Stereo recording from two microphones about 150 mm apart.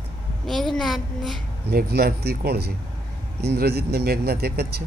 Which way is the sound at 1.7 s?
90° right.